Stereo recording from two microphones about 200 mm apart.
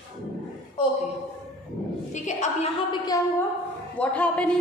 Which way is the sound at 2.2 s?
35° left (ahead or behind).